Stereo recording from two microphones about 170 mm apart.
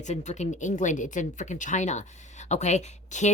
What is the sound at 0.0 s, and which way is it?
Speech, 40° left (ahead or behind).